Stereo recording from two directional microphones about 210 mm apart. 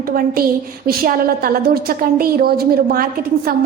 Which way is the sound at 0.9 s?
45° right (ahead or behind).